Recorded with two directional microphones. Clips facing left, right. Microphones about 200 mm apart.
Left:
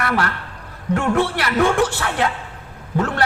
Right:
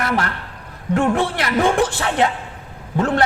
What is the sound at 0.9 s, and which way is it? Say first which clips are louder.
A man's voice: right 1 dB; 15° right (ahead or behind).